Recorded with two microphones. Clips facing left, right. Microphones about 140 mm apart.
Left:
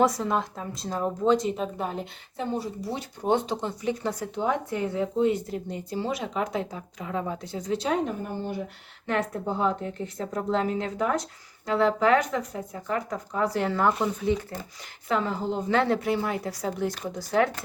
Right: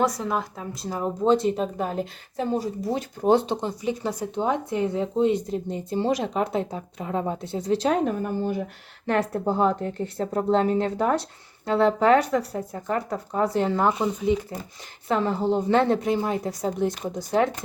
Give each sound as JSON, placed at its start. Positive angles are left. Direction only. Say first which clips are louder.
{"t": 0.0, "sound": "a woman's voice", "louder": "left 1 dB", "side_deg": 0}
{"t": 1.2, "sound": "speech", "louder": "right 2 dB", "side_deg": -30}
{"t": 2.8, "sound": "speech", "louder": "right 6 dB", "side_deg": -45}
{"t": 3.4, "sound": "speech", "louder": "right 3 dB", "side_deg": -25}
{"t": 3.7, "sound": "a woman's voice", "louder": "right 1 dB", "side_deg": -15}
{"t": 8.0, "sound": "a woman's voice", "louder": "right 5 dB", "side_deg": -50}
{"t": 14.1, "sound": "speech", "louder": "right 3 dB", "side_deg": -10}
{"t": 15.0, "sound": "speech", "louder": "right 4 dB", "side_deg": -30}